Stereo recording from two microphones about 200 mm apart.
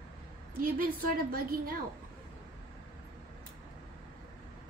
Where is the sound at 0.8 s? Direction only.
45° right (ahead or behind).